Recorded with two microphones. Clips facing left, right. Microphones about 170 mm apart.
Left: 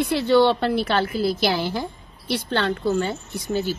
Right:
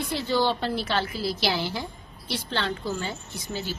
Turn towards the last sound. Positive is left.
turn(degrees=55)  # may be behind; listen again after turning